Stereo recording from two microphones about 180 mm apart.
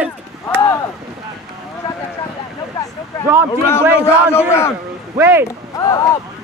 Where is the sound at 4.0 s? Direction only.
15° left (ahead or behind).